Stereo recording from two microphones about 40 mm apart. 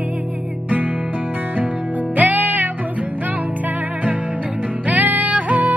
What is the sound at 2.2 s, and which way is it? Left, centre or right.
Music, right.